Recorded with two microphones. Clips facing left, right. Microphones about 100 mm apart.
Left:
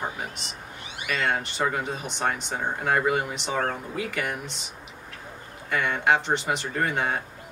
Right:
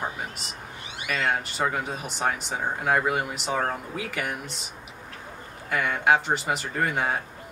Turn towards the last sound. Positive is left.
turn(degrees=0)  # may be behind; listen again after turning